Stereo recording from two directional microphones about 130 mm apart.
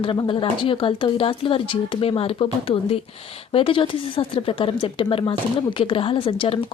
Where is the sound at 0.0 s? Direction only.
40° left (ahead or behind).